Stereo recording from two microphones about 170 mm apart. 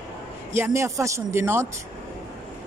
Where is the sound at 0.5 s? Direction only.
15° right (ahead or behind).